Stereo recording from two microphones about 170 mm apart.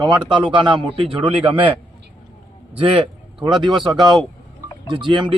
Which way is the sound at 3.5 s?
25° right (ahead or behind).